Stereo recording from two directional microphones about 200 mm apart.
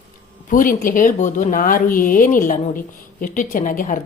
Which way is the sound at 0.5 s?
45° left (ahead or behind).